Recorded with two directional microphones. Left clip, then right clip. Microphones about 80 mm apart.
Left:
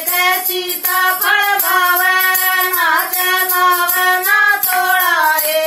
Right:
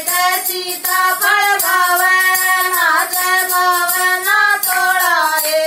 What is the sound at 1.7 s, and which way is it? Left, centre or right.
Music, right.